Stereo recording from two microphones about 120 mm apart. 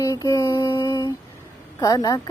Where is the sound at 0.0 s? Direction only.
25° left (ahead or behind); by 1.1 s 45° left (ahead or behind).